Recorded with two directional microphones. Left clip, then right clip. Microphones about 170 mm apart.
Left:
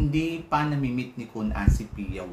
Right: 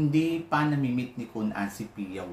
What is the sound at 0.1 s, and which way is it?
Speech, 5° left (ahead or behind).